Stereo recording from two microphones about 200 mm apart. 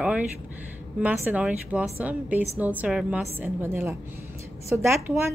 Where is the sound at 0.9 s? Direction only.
5° right (ahead or behind).